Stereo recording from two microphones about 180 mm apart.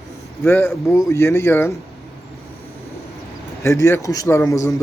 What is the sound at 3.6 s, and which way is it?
A man's voice, 15° left (ahead or behind).